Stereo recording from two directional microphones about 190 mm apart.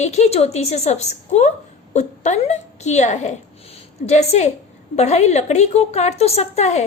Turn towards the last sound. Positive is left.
turn(degrees=35)  # may be behind; listen again after turning